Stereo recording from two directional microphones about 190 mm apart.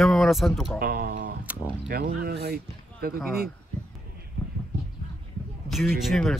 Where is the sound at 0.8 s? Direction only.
55° right (ahead or behind).